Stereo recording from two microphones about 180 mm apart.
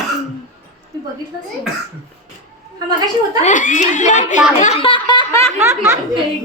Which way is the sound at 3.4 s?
45° left (ahead or behind).